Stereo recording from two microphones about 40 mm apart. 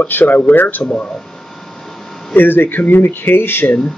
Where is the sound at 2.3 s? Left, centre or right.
Left.